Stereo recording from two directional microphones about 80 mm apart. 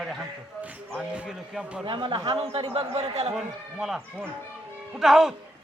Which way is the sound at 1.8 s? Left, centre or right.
Right.